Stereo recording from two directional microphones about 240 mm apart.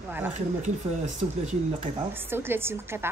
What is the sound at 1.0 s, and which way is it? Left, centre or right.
Speech, right.